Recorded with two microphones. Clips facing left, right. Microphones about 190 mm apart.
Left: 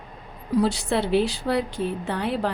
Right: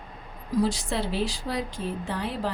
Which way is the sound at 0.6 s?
65° left (ahead or behind).